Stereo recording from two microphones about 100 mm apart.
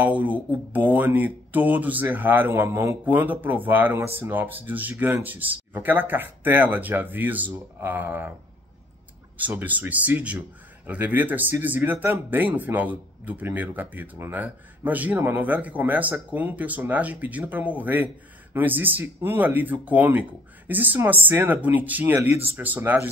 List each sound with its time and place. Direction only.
0.0 s speech: 15° right (ahead or behind)
9.4 s speech: 15° right (ahead or behind)